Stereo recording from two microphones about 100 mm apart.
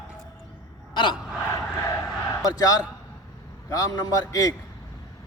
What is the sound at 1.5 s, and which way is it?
Crowd, 35° left (ahead or behind).